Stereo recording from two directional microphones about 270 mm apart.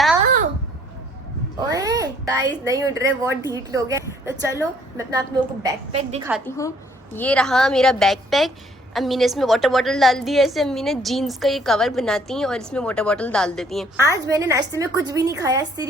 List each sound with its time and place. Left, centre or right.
1.5 s a woman's voice: centre
5.9 s a woman's voice: right
6.4 s a woman's voice: centre
14.3 s a woman's voice: centre